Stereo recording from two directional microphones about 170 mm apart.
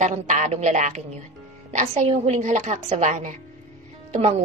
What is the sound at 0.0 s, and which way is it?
A woman's voice, 45° right (ahead or behind).